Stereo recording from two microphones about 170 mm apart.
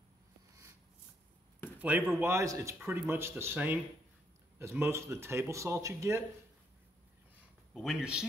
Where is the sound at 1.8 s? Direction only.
10° right (ahead or behind).